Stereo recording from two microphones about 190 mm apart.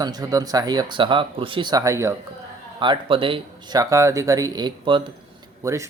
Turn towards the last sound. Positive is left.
turn(degrees=-15)  # may be behind; listen again after turning